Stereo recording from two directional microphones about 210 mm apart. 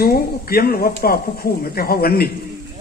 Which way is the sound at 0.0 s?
45° left (ahead or behind).